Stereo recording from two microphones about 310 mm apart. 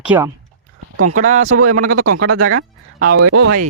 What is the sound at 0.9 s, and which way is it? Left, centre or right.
Speech, right.